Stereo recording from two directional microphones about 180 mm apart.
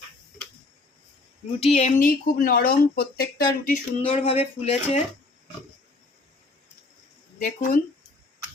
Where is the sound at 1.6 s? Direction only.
35° left (ahead or behind).